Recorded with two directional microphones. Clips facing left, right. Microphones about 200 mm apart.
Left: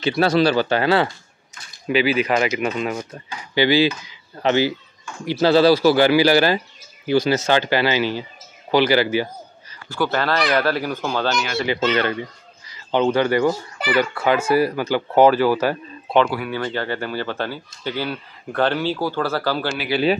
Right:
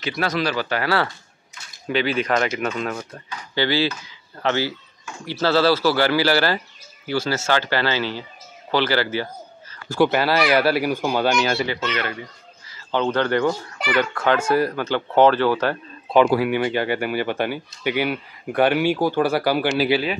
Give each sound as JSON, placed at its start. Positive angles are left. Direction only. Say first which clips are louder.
{"t": 0.0, "sound": "speech", "louder": "left 7 dB", "side_deg": 30}
{"t": 1.9, "sound": "a child's voice", "louder": "left 3 dB", "side_deg": 5}
{"t": 9.9, "sound": "speech", "louder": "right 4 dB", "side_deg": -20}
{"t": 10.2, "sound": "speech", "louder": "right 1 dB", "side_deg": -10}
{"t": 11.9, "sound": "speech", "louder": "left 6 dB", "side_deg": 30}
{"t": 12.6, "sound": "a child's voice", "louder": "left 4 dB", "side_deg": 15}
{"t": 16.4, "sound": "speech", "louder": "right 4 dB", "side_deg": -15}